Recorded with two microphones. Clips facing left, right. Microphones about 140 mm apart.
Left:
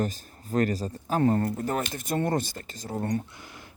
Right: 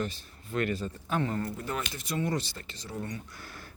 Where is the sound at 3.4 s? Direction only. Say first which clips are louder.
Even; 20° left (ahead or behind).